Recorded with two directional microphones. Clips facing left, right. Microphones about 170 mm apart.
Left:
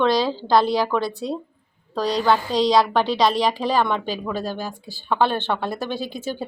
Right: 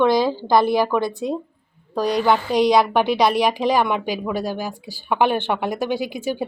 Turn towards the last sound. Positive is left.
turn(degrees=-15)  # may be behind; listen again after turning